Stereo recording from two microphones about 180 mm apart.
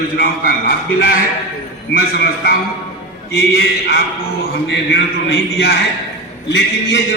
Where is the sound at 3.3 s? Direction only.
60° left (ahead or behind).